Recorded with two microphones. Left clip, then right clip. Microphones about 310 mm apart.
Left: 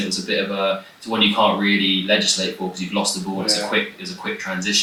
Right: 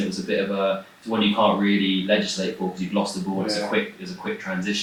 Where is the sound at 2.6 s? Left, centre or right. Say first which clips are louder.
Left 2 dB; right.